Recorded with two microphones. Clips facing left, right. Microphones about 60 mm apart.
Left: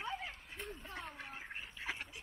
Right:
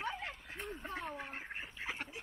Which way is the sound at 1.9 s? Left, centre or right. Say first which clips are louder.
Right 3 dB; right.